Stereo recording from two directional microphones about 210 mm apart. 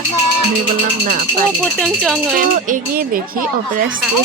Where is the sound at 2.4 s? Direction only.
40° right (ahead or behind).